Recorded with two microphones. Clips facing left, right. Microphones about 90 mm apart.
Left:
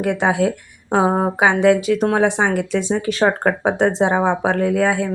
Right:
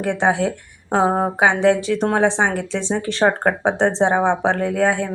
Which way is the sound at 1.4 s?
25° right (ahead or behind).